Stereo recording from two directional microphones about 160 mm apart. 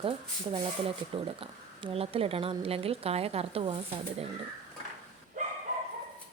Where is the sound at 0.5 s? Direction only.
35° right (ahead or behind).